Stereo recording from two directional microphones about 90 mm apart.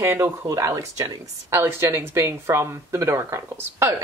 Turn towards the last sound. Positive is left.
turn(degrees=-30)  # may be behind; listen again after turning